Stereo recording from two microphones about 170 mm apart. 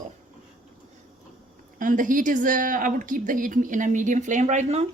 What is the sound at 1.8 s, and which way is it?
A woman's voice, 50° right (ahead or behind).